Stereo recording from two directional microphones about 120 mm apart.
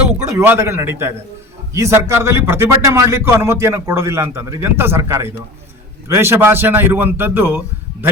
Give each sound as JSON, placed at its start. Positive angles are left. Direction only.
{"t": 0.3, "sound": "a man's voice", "side_deg": -20}